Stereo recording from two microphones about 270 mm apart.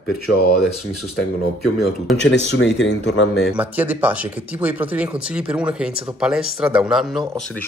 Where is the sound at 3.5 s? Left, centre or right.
Centre.